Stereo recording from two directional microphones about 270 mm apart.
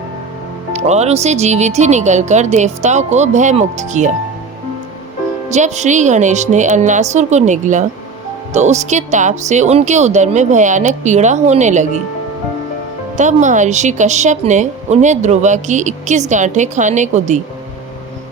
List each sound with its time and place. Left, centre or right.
0.7 s a woman's voice: right
5.5 s a woman's voice: right
13.1 s a woman's voice: right